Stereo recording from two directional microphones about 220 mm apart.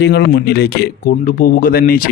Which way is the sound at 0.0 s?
50° left (ahead or behind).